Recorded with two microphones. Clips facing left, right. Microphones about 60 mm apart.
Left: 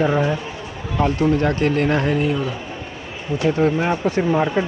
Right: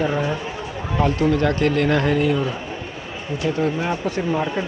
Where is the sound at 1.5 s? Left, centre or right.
Left.